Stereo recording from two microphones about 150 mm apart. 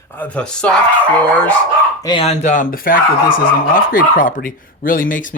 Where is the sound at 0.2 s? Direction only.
10° left (ahead or behind).